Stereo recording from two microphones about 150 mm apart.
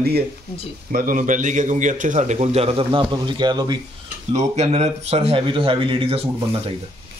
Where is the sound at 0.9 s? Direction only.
65° right (ahead or behind); by 3.8 s 30° right (ahead or behind).